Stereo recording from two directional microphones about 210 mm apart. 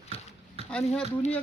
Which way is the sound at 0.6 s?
30° right (ahead or behind).